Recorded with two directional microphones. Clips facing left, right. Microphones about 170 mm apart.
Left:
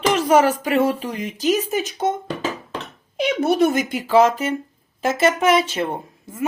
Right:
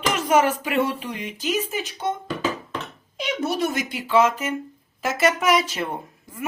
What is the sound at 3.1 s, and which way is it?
Speech, 60° left (ahead or behind).